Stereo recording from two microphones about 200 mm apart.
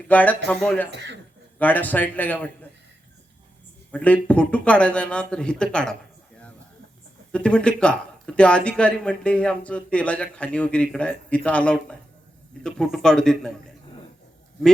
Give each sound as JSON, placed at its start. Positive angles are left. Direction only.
{"t": 0.1, "sound": "speech", "side_deg": 10}
{"t": 0.9, "sound": "speech", "side_deg": -60}
{"t": 1.5, "sound": "speech", "side_deg": 10}
{"t": 3.9, "sound": "speech", "side_deg": 5}
{"t": 7.3, "sound": "speech", "side_deg": 5}